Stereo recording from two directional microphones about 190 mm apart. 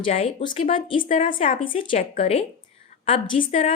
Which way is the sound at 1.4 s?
45° left (ahead or behind).